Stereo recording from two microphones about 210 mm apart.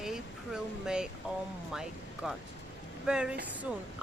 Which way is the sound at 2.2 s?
Centre (ahead or behind).